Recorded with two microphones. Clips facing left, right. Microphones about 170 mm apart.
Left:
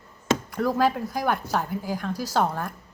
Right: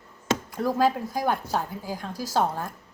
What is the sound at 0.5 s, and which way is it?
A woman's voice, 25° right (ahead or behind).